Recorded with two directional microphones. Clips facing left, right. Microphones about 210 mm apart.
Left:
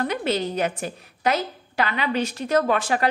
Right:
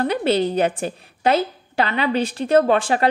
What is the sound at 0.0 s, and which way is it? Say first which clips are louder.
A woman's voice: right 5 dB; 30° right (ahead or behind).